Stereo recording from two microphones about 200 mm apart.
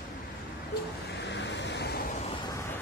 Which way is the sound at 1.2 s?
60° left (ahead or behind).